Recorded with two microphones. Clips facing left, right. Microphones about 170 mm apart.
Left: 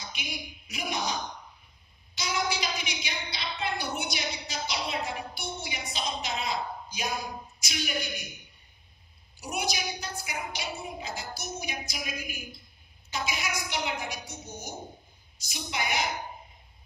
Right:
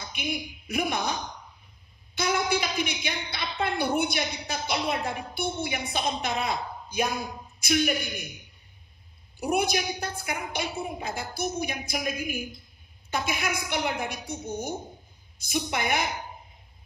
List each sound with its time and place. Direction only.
0.0 s speech: 55° right (ahead or behind)
2.1 s a woman's voice: 55° right (ahead or behind)
9.4 s a woman's voice: 55° right (ahead or behind)